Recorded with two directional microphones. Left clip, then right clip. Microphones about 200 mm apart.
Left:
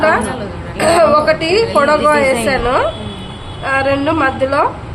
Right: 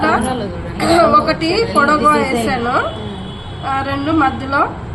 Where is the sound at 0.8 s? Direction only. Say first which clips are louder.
Left 1 dB; 60° left (ahead or behind).